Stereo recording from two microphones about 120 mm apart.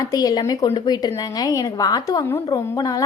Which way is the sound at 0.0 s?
30° left (ahead or behind).